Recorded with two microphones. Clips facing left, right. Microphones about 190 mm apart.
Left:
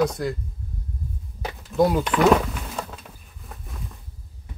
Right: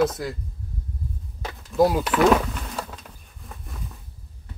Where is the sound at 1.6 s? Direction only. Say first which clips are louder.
Even; centre (ahead or behind).